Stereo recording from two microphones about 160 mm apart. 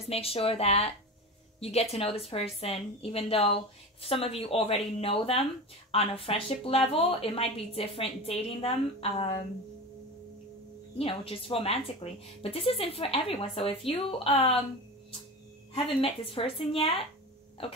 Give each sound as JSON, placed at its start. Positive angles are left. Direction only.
{"t": 0.0, "sound": "a woman's voice", "side_deg": 40}
{"t": 11.0, "sound": "a woman's voice", "side_deg": 35}
{"t": 15.7, "sound": "a woman's voice", "side_deg": 35}